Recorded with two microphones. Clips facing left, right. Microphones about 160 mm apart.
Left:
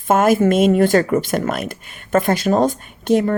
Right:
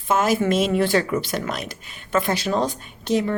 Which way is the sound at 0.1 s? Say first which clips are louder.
Left 6 dB; 50° left (ahead or behind).